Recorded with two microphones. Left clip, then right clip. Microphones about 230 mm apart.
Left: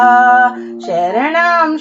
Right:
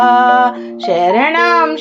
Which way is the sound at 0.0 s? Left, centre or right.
Right.